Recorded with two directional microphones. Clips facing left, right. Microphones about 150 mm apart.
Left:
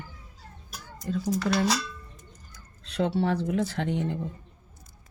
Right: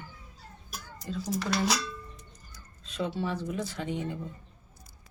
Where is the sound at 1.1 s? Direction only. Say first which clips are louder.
Left 6 dB; 55° left (ahead or behind).